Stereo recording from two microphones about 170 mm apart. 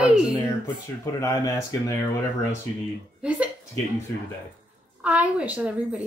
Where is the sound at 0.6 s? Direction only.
20° left (ahead or behind).